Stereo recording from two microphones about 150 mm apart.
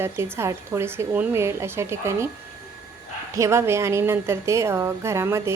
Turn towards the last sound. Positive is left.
turn(degrees=-15)  # may be behind; listen again after turning